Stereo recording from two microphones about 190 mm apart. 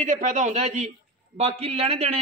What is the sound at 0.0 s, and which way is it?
A man's voice, 40° right (ahead or behind).